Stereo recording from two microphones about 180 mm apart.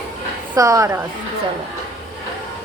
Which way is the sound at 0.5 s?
20° right (ahead or behind).